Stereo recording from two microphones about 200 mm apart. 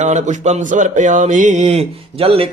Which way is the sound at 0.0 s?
35° right (ahead or behind).